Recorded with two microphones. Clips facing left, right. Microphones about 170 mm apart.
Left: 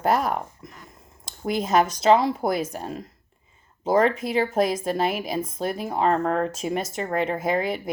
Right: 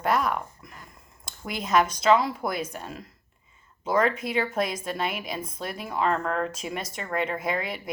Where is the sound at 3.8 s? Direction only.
35° left (ahead or behind).